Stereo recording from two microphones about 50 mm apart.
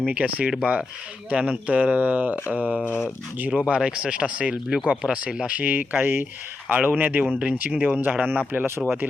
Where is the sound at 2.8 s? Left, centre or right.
Left.